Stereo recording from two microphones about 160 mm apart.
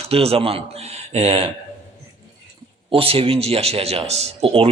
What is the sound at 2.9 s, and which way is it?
A man's voice, 35° right (ahead or behind).